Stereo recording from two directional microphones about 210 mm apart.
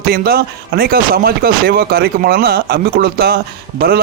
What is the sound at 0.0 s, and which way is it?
Speech, 45° right (ahead or behind).